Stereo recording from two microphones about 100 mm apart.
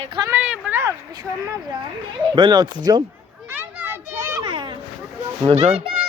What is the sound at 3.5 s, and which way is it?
Children playing, 20° right (ahead or behind).